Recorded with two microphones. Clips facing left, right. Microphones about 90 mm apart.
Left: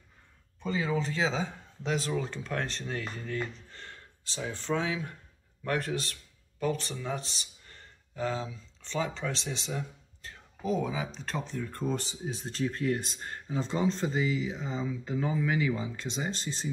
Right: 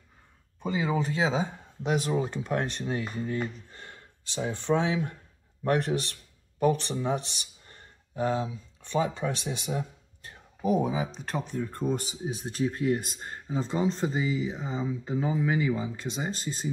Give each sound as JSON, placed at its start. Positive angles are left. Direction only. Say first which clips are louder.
{"t": 0.6, "sound": "speech", "louder": "right 2 dB", "side_deg": -15}
{"t": 13.6, "sound": "speech", "louder": "right 2 dB", "side_deg": -10}
{"t": 14.2, "sound": "speech", "louder": "right 1 dB", "side_deg": -40}
{"t": 14.6, "sound": "speech", "louder": "right 2 dB", "side_deg": -10}